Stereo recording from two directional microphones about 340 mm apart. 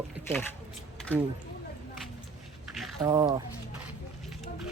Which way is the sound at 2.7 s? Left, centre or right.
Centre.